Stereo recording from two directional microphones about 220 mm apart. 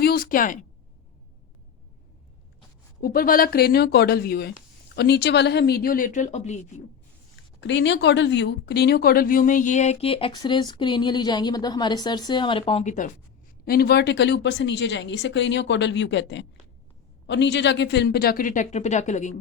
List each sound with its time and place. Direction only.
0.0 s speech: 40° left (ahead or behind)
3.0 s speech: 40° left (ahead or behind)
7.6 s speech: 55° left (ahead or behind); by 13.1 s 35° left (ahead or behind)
13.7 s speech: 45° left (ahead or behind)